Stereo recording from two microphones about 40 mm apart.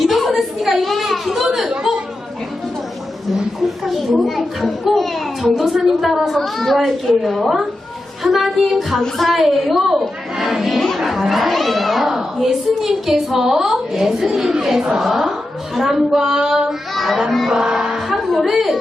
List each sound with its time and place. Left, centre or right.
0.0 s a sound: centre
1.3 s chatter: centre
3.8 s a child's voice: centre
4.9 s a sound: centre
5.5 s a woman's voice: centre
16.9 s speech: centre
17.5 s a woman's voice: centre
18.1 s a sound: centre
18.5 s speech: centre